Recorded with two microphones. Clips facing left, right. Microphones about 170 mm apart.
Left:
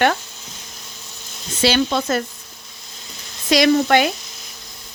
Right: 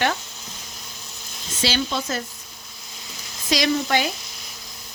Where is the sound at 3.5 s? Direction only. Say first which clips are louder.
Left 7 dB; 60° left (ahead or behind).